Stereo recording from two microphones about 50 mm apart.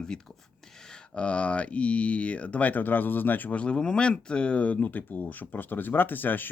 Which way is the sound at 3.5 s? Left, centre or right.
Left.